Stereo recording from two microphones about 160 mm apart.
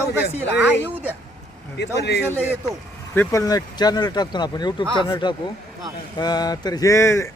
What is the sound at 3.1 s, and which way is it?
Speech, 20° left (ahead or behind).